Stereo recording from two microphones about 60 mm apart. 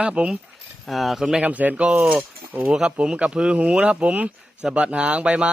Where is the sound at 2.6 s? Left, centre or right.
Centre.